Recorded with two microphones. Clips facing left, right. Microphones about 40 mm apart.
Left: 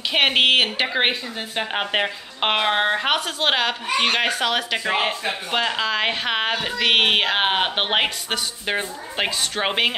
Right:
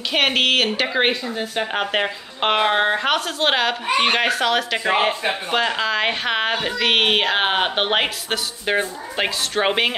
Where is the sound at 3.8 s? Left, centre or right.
Centre.